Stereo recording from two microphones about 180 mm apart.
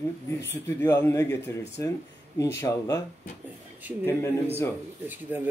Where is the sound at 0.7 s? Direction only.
15° left (ahead or behind).